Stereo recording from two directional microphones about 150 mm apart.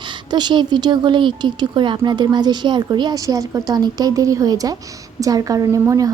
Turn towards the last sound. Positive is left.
turn(degrees=-25)  # may be behind; listen again after turning